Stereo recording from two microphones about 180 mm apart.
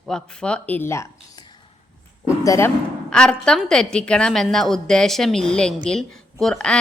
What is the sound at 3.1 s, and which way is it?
Speech, 5° left (ahead or behind).